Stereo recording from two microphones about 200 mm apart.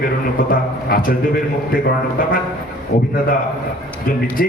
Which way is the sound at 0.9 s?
45° left (ahead or behind).